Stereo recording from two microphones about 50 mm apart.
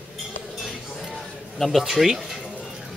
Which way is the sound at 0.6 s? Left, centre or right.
Centre.